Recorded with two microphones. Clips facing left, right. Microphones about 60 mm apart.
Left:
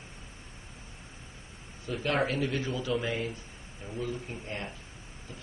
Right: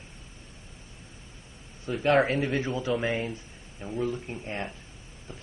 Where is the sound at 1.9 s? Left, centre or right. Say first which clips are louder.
Right 6 dB; right.